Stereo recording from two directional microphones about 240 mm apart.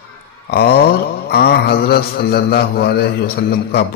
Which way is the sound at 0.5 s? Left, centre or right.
Left.